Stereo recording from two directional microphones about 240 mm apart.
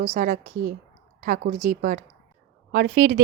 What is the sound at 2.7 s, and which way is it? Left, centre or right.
Speech, right.